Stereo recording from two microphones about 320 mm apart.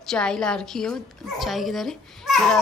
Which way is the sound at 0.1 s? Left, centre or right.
Centre.